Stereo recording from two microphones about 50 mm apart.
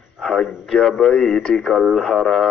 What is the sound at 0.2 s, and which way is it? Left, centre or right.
Speech, centre.